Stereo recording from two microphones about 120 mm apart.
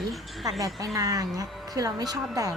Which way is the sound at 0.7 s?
30° right (ahead or behind).